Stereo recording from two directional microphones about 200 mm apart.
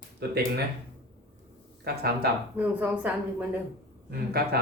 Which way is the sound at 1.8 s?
50° right (ahead or behind).